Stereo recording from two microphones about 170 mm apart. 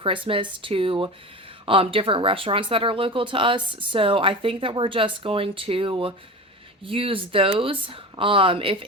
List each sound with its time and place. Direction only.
0.0 s speech: 30° right (ahead or behind)